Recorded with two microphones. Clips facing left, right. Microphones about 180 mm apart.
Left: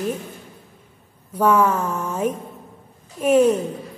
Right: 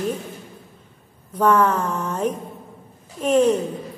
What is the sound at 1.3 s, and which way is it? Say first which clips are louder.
A woman's voice: even; 10° left (ahead or behind).